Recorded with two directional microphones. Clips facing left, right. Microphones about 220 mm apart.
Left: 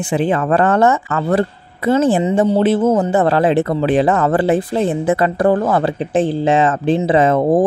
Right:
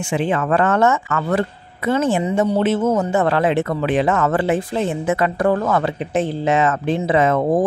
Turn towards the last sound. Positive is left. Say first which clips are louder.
# left 3 dB
turn(degrees=30)  # may be behind; listen again after turning